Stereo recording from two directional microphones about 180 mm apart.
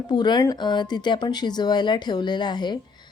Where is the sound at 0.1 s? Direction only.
25° left (ahead or behind).